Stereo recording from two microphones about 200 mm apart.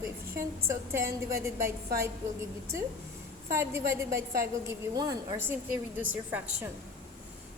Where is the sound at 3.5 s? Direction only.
15° right (ahead or behind).